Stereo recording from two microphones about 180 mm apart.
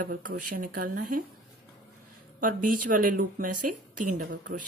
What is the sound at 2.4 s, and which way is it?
Speech, 50° right (ahead or behind).